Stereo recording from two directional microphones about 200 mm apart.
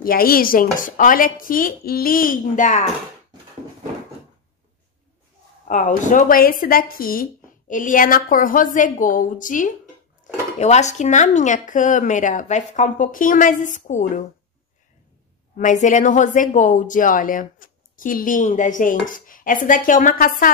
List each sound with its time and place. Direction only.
0.0 s speech: 45° left (ahead or behind)
5.7 s a woman's voice: 40° left (ahead or behind)
15.5 s a woman's voice: 40° left (ahead or behind)